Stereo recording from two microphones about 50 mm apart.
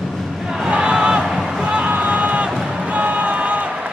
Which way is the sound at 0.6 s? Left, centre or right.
Centre.